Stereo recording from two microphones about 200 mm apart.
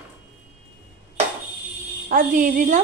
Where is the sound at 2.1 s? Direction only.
40° right (ahead or behind).